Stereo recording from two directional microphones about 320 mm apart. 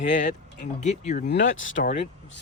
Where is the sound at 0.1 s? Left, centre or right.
Left.